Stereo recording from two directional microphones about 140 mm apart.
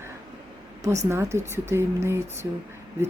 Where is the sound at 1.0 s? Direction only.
20° right (ahead or behind).